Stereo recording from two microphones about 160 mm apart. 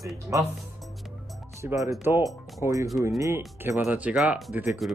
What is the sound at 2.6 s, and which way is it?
Speech, 20° right (ahead or behind).